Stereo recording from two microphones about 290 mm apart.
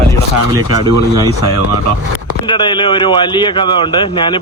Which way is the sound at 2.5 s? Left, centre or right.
Centre.